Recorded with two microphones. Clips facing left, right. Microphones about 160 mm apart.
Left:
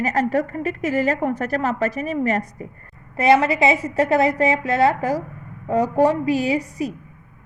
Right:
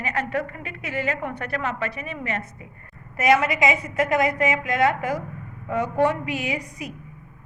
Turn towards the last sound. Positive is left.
turn(degrees=35)  # may be behind; listen again after turning